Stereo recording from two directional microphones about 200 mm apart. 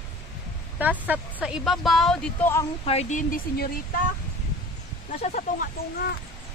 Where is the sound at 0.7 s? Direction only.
10° right (ahead or behind).